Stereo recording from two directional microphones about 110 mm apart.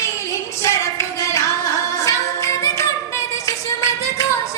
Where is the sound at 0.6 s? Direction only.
25° left (ahead or behind).